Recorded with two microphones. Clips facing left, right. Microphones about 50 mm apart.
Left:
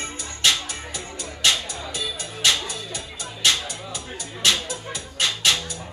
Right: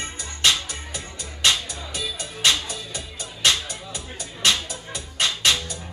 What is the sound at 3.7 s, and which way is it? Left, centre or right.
Music, right.